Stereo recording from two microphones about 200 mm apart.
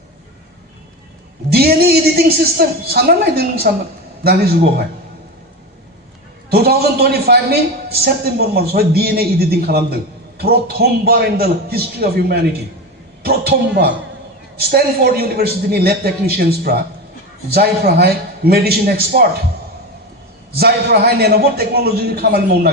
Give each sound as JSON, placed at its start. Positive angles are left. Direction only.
{"t": 1.5, "sound": "a man's voice", "side_deg": -50}
{"t": 6.5, "sound": "a man's voice", "side_deg": -50}
{"t": 20.6, "sound": "a man's voice", "side_deg": -50}